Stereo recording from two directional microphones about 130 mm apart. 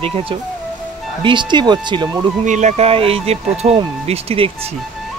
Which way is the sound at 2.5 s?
65° right (ahead or behind).